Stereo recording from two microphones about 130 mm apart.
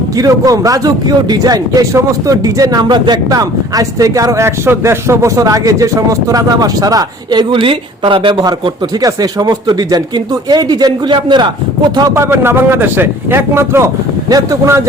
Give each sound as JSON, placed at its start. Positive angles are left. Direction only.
{"t": 0.2, "sound": "a man's voice", "side_deg": -25}
{"t": 12.1, "sound": "speech", "side_deg": -20}